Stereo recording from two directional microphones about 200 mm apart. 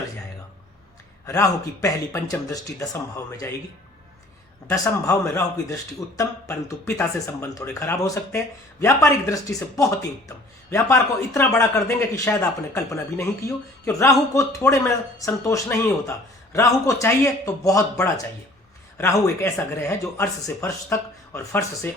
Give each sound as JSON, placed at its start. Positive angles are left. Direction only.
{"t": 1.3, "sound": "speech", "side_deg": 15}
{"t": 4.7, "sound": "speech", "side_deg": 15}
{"t": 18.9, "sound": "speech", "side_deg": 10}